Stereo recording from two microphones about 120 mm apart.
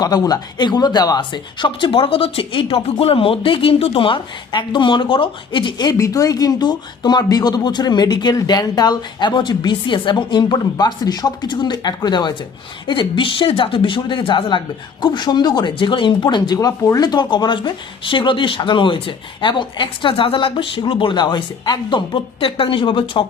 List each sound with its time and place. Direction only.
0.0 s speech: 35° left (ahead or behind)